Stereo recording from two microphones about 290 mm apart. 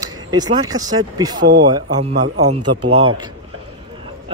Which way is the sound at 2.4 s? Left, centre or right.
Right.